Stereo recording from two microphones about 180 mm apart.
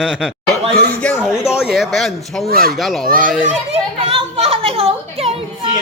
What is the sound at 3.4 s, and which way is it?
A child's voice, 35° right (ahead or behind).